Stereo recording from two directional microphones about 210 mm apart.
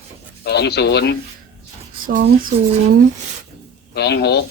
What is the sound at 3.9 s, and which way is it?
Speech, 50° left (ahead or behind).